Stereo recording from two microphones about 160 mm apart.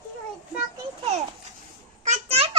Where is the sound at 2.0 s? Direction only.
45° right (ahead or behind).